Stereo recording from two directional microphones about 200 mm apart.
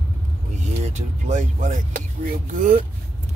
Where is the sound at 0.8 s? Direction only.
35° right (ahead or behind).